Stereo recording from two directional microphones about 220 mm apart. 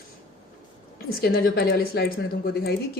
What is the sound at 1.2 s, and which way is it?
Speech, 45° left (ahead or behind).